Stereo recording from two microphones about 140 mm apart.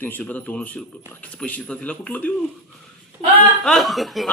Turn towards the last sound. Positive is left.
turn(degrees=0)  # may be behind; listen again after turning